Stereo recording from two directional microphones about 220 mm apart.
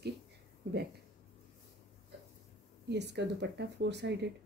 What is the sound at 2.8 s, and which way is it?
Speech, 50° right (ahead or behind).